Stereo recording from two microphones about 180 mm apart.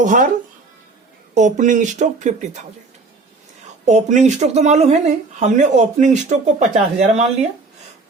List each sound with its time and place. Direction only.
0.0 s speech: 45° right (ahead or behind)
1.3 s speech: 45° right (ahead or behind)
3.8 s speech: 40° right (ahead or behind)